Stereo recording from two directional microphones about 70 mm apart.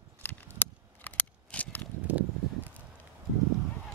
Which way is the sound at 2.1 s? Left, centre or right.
Right.